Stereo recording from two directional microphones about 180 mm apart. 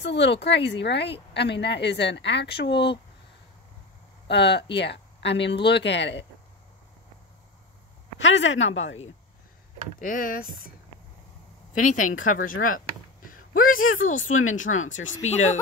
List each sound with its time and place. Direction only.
0.0 s a woman's voice: 80° left
4.3 s a woman's voice: 70° left (ahead or behind)
8.2 s speech: 90° left
9.9 s speech: 50° left (ahead or behind)
11.7 s speech: 45° left (ahead or behind)
13.3 s a sound: 50° left (ahead or behind)
14.0 s speech: 45° left (ahead or behind)